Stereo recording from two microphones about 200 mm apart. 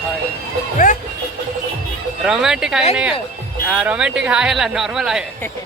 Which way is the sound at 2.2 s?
5° right (ahead or behind).